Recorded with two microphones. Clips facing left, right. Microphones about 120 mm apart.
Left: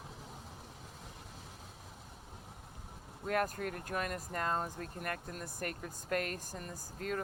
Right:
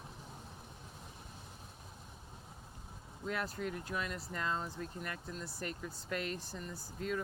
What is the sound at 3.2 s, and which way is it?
Speech, 50° left (ahead or behind).